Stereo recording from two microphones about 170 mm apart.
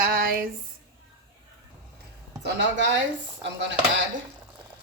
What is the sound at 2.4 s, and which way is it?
Speech, 90° right.